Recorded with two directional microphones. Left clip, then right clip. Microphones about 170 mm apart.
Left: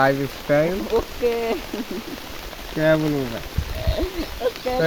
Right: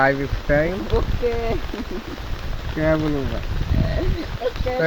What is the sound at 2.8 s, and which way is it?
Speech, 20° left (ahead or behind).